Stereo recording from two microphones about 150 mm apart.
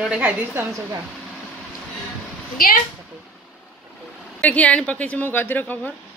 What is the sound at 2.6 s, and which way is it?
Speech, 70° left (ahead or behind).